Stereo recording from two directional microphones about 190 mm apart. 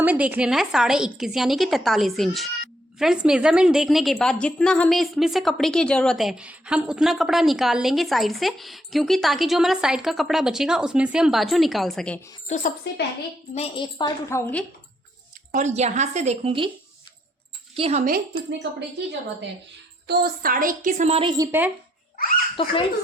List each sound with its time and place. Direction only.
0.0 s a woman's voice: 10° right (ahead or behind); by 12.3 s 5° left (ahead or behind)
12.5 s a woman's voice: 35° left (ahead or behind)
12.9 s a woman's voice: 65° left (ahead or behind)
13.5 s a woman's voice: 30° left (ahead or behind)
14.3 s speech: 15° left (ahead or behind)
15.5 s a woman's voice: 35° right (ahead or behind)
17.7 s a woman's voice: 30° right (ahead or behind)
18.0 s a woman's voice: 50° right (ahead or behind)
20.1 s a woman's voice: 55° right (ahead or behind); by 21.7 s 15° right (ahead or behind)
22.1 s hiccup: 45° left (ahead or behind)
22.6 s speech: 30° left (ahead or behind)